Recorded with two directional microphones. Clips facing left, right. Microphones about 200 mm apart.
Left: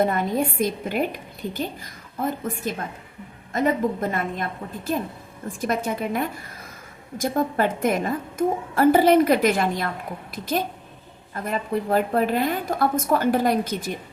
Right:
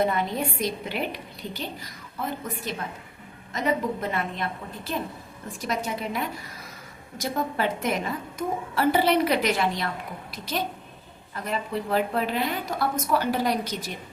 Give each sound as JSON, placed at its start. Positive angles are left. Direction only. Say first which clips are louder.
{"t": 0.0, "sound": "a woman's voice", "louder": "left 3 dB", "side_deg": 45}